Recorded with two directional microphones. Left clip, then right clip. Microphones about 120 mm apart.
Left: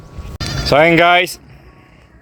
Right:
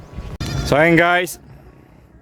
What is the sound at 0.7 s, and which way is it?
Speech, 20° right (ahead or behind).